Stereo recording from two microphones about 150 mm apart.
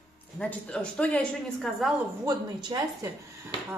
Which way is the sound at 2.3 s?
25° right (ahead or behind).